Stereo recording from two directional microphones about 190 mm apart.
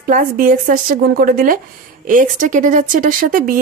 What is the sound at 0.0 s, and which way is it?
A woman's voice, 45° right (ahead or behind).